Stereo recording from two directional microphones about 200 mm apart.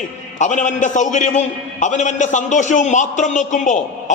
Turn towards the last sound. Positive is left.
turn(degrees=40)  # may be behind; listen again after turning